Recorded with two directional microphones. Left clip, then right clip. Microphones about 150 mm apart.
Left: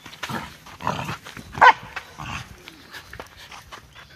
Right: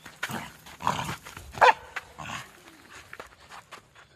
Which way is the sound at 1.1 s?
40° right (ahead or behind).